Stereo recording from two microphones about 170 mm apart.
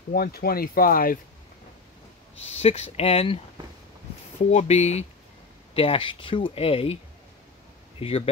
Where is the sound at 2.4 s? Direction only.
40° left (ahead or behind).